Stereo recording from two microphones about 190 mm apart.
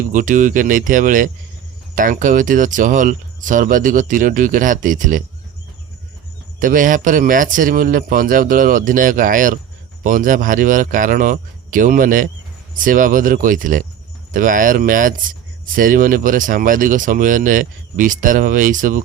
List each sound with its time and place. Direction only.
0.0 s speech: 45° right (ahead or behind)
6.6 s speech: 45° right (ahead or behind)